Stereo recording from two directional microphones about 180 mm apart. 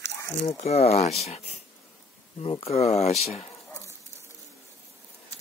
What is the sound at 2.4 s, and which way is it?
Speech, 30° left (ahead or behind).